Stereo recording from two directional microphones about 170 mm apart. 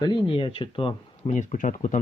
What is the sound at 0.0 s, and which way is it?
Speech, 25° left (ahead or behind).